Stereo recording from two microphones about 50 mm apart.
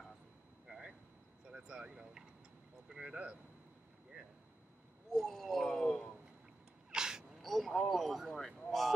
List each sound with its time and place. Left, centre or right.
0.7 s vehicle: centre
3.0 s speech: right
5.2 s speech: centre
6.9 s sneeze: centre
7.4 s speech: centre